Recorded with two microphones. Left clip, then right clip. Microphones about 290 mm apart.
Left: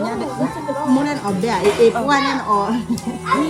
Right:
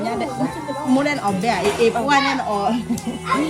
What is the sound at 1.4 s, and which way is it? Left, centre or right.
Speech, centre.